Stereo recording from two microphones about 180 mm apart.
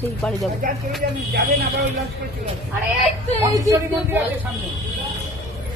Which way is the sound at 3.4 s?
20° right (ahead or behind).